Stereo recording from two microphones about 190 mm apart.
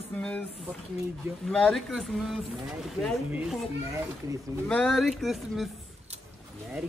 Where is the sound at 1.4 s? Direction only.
5° left (ahead or behind).